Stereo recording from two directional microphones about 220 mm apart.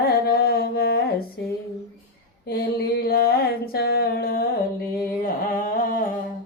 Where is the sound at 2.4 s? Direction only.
45° left (ahead or behind).